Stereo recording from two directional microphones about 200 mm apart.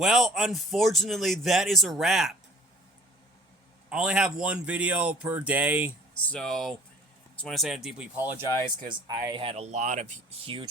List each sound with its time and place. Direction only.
0.0 s speech: centre (ahead or behind)
3.8 s speech: 5° right (ahead or behind)
6.1 s speech: 5° left (ahead or behind)
8.9 s speech: 20° right (ahead or behind)